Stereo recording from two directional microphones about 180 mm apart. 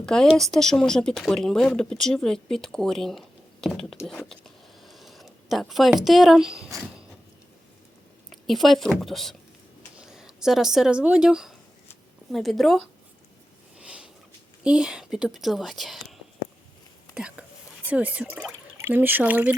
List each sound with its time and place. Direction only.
0.0 s speech: 5° left (ahead or behind)
8.3 s a woman's voice: centre (ahead or behind)
13.7 s sniff: 5° right (ahead or behind)
14.6 s speech: 5° right (ahead or behind)
17.2 s speech: 5° right (ahead or behind)